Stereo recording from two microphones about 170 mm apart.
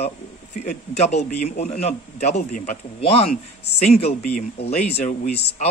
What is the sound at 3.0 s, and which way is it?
A man's voice, 35° left (ahead or behind).